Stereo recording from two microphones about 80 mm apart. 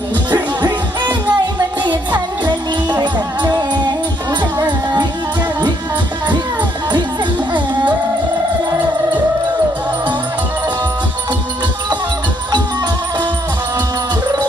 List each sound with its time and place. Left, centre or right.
0.3 s music: right
7.5 s music: right